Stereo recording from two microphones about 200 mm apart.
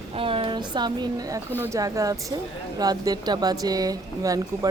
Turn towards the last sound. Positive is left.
turn(degrees=-15)  # may be behind; listen again after turning